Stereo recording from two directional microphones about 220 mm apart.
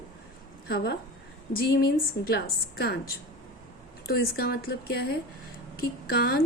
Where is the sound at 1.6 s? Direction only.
45° left (ahead or behind).